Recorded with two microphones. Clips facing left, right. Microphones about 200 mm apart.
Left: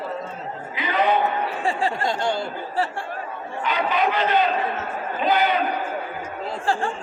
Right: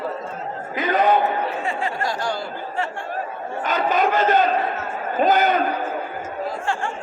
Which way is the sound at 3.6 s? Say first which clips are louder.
Right 2 dB; 45° right (ahead or behind).